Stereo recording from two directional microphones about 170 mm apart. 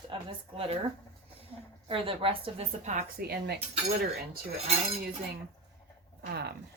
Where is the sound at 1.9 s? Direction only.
30° right (ahead or behind).